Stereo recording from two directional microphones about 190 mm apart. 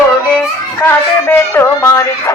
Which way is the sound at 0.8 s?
10° left (ahead or behind).